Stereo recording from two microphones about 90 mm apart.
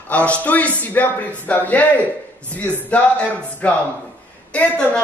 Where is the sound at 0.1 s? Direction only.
15° left (ahead or behind).